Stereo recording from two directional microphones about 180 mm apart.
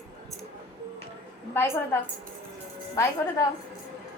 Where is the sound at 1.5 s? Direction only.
15° left (ahead or behind).